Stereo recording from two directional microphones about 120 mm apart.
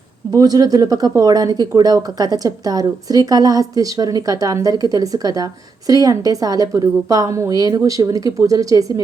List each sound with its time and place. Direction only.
0.3 s a woman's voice: 30° right (ahead or behind)